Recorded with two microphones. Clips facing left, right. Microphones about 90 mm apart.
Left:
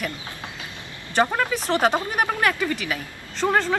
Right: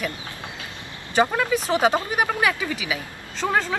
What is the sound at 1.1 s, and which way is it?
A woman's voice, centre (ahead or behind).